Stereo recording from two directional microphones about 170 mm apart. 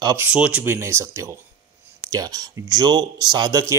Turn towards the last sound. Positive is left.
turn(degrees=-20)  # may be behind; listen again after turning